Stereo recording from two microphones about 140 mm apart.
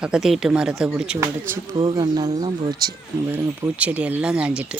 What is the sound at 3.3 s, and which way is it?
Speech, 10° right (ahead or behind).